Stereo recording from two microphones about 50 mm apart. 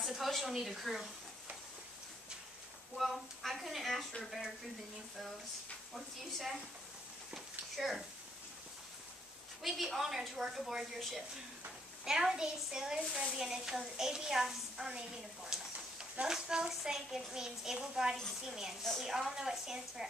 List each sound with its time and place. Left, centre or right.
0.0 s speech: centre
3.0 s a woman's voice: centre
7.3 s a sound: centre
9.6 s a woman's voice: centre
12.0 s a woman's voice: centre
18.8 s a woman's voice: centre
19.0 s a woman's voice: centre